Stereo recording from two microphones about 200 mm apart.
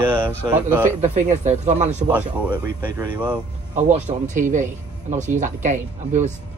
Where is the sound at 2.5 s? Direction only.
20° right (ahead or behind).